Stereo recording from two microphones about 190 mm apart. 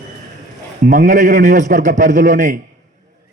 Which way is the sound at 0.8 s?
40° right (ahead or behind).